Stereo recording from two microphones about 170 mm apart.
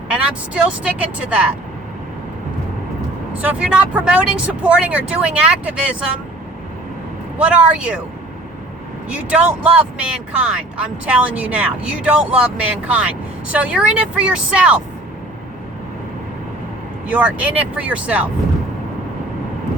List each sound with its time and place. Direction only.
0.1 s speech: 5° right (ahead or behind)
3.3 s speech: 5° right (ahead or behind)
7.3 s speech: 5° right (ahead or behind)
9.0 s speech: 5° right (ahead or behind)
17.1 s speech: 10° right (ahead or behind)